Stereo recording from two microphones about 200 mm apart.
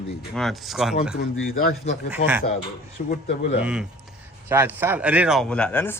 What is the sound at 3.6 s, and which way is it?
Speech, 5° right (ahead or behind).